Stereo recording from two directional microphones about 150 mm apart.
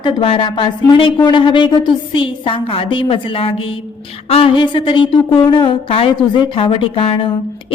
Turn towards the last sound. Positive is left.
turn(degrees=35)  # may be behind; listen again after turning